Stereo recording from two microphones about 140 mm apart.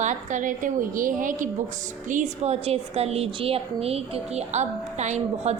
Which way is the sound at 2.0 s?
60° right (ahead or behind).